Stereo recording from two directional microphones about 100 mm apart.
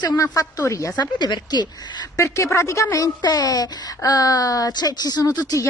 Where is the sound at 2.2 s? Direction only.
30° left (ahead or behind).